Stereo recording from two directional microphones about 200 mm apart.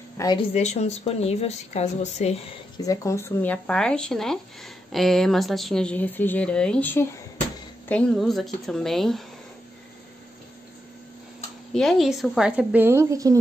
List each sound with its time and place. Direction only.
0.2 s a woman's voice: 20° left (ahead or behind)
0.6 s speech: 35° left (ahead or behind)
2.8 s a woman's voice: 15° left (ahead or behind); by 9.2 s centre (ahead or behind)
11.7 s a woman's voice: centre (ahead or behind); by 13.4 s 15° right (ahead or behind)